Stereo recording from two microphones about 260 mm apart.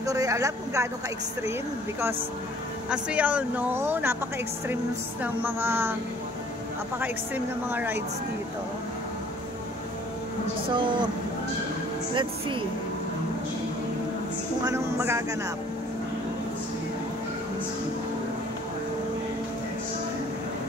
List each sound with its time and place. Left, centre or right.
0.0 s speech: centre
2.9 s speech: centre
5.2 s speech: centre
7.0 s speech: centre
10.7 s speech: centre
12.1 s speech: centre
14.6 s speech: centre